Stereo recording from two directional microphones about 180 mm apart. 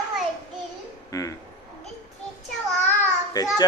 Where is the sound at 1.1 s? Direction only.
20° left (ahead or behind).